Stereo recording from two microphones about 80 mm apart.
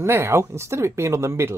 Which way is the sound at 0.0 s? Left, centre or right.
Right.